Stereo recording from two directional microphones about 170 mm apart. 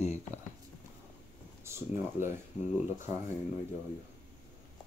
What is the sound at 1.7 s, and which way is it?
Speech, 15° right (ahead or behind).